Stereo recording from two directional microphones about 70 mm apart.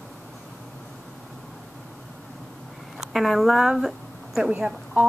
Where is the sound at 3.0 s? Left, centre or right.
Centre.